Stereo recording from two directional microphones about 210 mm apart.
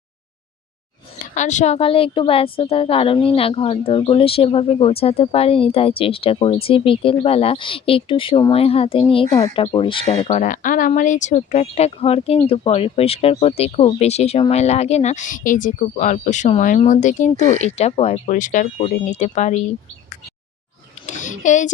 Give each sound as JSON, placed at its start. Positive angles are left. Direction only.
{"t": 1.2, "sound": "a woman's voice", "side_deg": 35}
{"t": 10.2, "sound": "a woman's voice", "side_deg": 35}
{"t": 21.1, "sound": "a sound", "side_deg": 35}